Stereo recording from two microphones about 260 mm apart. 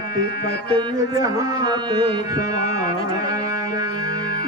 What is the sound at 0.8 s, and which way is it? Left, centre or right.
A man's voice, centre.